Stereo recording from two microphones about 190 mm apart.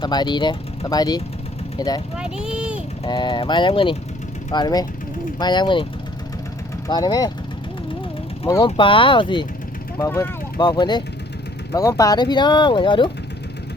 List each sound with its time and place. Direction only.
0.0 s speech: 20° left (ahead or behind)
2.1 s speech: 5° right (ahead or behind)
3.0 s speech: 25° left (ahead or behind)
8.4 s speech: 20° left (ahead or behind)
10.0 s speech: 15° left (ahead or behind)